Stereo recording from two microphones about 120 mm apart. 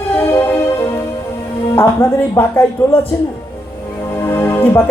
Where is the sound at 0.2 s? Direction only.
20° left (ahead or behind).